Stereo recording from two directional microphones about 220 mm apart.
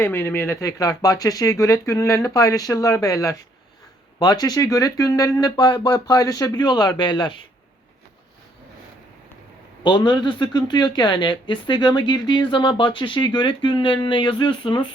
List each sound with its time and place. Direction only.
0.0 s speech: 10° left (ahead or behind)
9.8 s a woman's voice: 20° left (ahead or behind)